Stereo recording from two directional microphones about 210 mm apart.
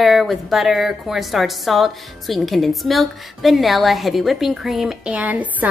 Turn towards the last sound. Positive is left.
turn(degrees=-5)  # may be behind; listen again after turning